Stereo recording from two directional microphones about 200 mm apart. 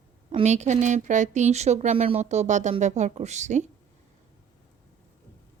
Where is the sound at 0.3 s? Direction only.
35° right (ahead or behind).